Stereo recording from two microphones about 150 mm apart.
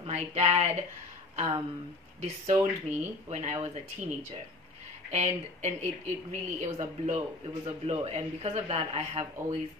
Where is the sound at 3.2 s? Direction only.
55° right (ahead or behind).